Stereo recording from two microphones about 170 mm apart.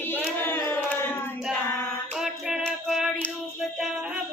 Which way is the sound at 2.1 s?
5° right (ahead or behind).